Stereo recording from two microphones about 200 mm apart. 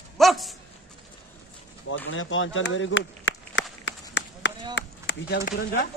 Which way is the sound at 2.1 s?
75° left (ahead or behind).